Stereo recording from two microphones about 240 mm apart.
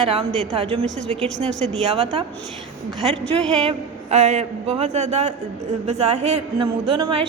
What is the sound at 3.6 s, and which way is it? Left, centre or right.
A man's voice, right.